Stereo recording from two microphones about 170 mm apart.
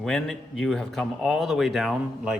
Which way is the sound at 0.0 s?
5° left (ahead or behind).